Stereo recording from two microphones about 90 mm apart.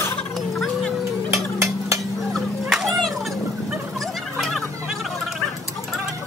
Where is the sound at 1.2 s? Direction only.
35° right (ahead or behind).